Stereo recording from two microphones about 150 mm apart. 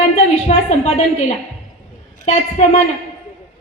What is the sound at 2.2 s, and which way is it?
Speech, 50° left (ahead or behind).